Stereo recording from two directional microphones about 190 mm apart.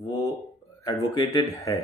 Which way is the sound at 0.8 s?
20° left (ahead or behind).